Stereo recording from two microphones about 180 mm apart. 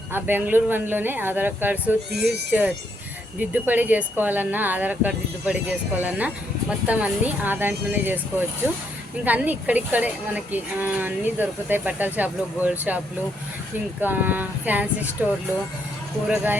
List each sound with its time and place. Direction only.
0.1 s speech: 10° right (ahead or behind)
14.0 s speech: 10° right (ahead or behind)